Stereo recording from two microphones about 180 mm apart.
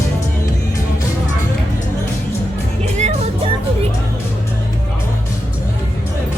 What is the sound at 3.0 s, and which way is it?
Music, 35° right (ahead or behind).